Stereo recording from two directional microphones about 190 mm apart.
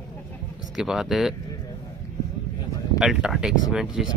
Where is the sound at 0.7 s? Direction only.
Centre (ahead or behind).